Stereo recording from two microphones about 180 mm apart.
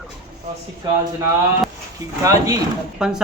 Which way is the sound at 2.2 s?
20° right (ahead or behind).